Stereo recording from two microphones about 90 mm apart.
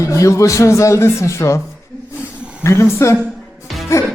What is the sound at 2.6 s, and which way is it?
A man's voice, 30° left (ahead or behind).